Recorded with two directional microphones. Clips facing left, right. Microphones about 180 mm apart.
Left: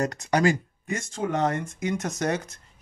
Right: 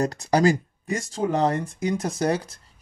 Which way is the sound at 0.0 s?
35° right (ahead or behind).